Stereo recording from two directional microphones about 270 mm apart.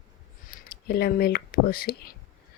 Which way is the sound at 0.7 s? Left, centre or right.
Left.